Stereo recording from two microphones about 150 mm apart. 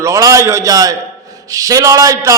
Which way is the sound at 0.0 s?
20° right (ahead or behind).